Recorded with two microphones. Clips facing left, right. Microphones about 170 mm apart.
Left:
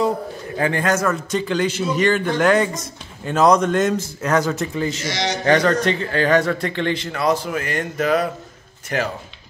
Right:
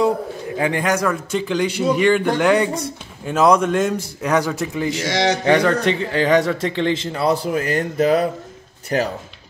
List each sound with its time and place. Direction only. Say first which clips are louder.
0.6 s a man's voice: even; 15° right (ahead or behind); by 8.3 s 35° right (ahead or behind)